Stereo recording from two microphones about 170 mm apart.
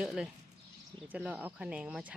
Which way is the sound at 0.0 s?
Centre (ahead or behind).